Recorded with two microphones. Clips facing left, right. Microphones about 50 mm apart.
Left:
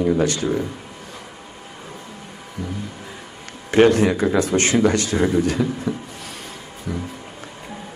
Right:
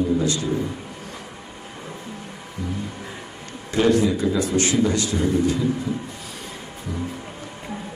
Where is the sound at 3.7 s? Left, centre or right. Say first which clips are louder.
Left 4 dB; left.